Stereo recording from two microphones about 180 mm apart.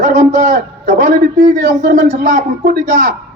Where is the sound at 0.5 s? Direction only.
50° right (ahead or behind).